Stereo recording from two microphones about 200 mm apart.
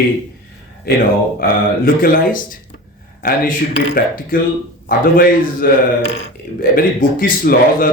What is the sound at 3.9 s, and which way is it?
A man's voice, 45° left (ahead or behind).